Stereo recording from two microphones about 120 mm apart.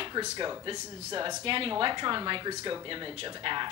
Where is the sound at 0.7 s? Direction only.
40° right (ahead or behind).